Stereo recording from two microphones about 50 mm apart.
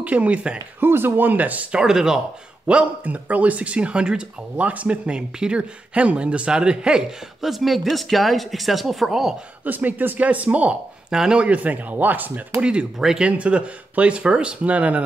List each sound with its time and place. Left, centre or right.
0.0 s speech: right
0.7 s speech: right
1.7 s speech: centre
2.7 s speech: right
7.4 s speech: centre
9.7 s speech: right
11.1 s speech: centre
11.4 s speech: right
12.5 s speech: right
13.4 s speech: right